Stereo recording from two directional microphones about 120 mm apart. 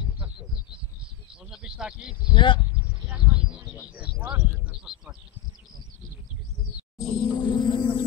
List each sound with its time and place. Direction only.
1.5 s speech: 5° right (ahead or behind)
2.3 s speech: 45° left (ahead or behind)
3.1 s a sound: 10° right (ahead or behind)
4.4 s speech: 10° right (ahead or behind)
7.0 s music: 40° left (ahead or behind)